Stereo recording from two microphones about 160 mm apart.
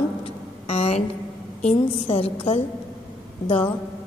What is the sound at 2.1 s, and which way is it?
Speech, 35° left (ahead or behind).